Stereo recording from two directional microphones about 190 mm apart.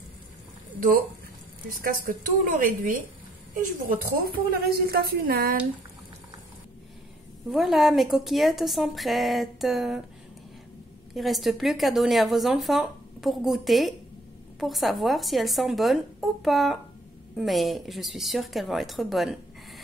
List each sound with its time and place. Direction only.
0.7 s a woman's voice: 45° right (ahead or behind)
4.2 s a woman's voice: 50° right (ahead or behind)
7.5 s speech: centre (ahead or behind)
11.1 s speech: centre (ahead or behind)